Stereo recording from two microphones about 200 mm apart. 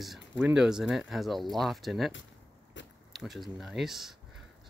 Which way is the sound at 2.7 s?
65° left (ahead or behind).